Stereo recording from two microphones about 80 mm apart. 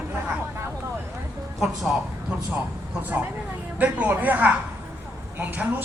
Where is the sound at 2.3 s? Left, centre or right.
Centre.